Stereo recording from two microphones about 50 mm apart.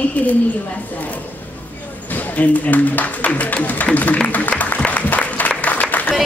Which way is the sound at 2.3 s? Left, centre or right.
Left.